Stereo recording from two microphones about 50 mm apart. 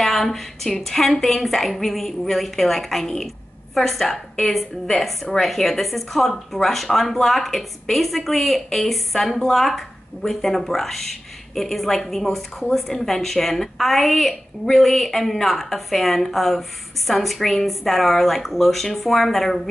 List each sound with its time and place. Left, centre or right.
0.0 s a woman's voice: centre